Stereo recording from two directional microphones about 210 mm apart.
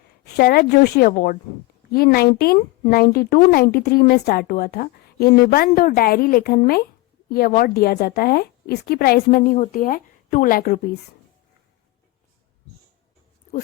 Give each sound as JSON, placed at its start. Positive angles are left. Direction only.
{"t": 0.3, "sound": "speech", "side_deg": 45}